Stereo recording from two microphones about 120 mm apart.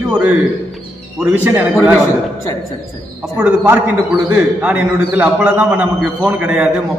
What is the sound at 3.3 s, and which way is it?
A man's voice, 10° right (ahead or behind).